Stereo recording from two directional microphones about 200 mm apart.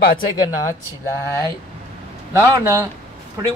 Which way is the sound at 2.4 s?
15° right (ahead or behind).